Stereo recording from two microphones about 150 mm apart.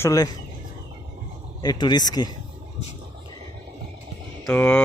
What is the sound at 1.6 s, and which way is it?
Speech, 30° left (ahead or behind).